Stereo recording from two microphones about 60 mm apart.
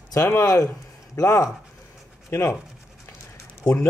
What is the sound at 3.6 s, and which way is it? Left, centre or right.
Speech, left.